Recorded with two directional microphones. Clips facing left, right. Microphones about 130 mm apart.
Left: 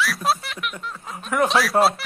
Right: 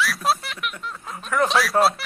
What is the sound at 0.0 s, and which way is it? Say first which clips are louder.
Speech: even; centre (ahead or behind).